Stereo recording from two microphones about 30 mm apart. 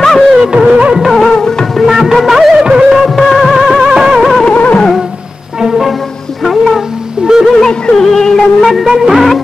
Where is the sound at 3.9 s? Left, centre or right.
Right.